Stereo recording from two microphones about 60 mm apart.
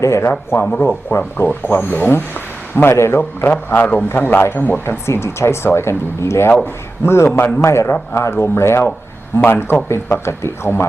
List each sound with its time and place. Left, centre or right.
0.0 s speech: left
0.6 s speech: left
1.4 s speech: left